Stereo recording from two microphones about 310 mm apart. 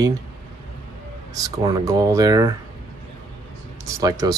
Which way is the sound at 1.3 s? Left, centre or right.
Centre.